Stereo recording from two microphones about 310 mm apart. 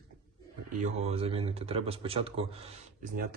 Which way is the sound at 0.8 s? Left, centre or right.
Right.